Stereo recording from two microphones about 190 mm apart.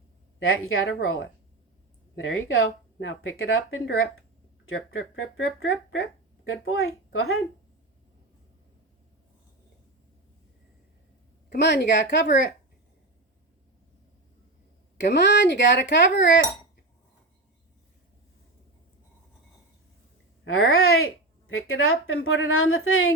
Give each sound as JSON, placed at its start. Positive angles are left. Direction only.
{"t": 0.3, "sound": "speech", "side_deg": 90}
{"t": 2.2, "sound": "speech", "side_deg": 90}
{"t": 11.4, "sound": "a woman's voice", "side_deg": 60}
{"t": 14.9, "sound": "a woman's voice", "side_deg": 65}
{"t": 20.4, "sound": "speech", "side_deg": 90}